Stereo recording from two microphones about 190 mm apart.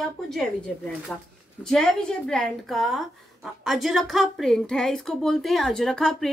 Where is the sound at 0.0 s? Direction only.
5° left (ahead or behind).